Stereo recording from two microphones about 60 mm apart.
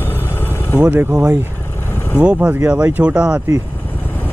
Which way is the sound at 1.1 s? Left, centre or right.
Right.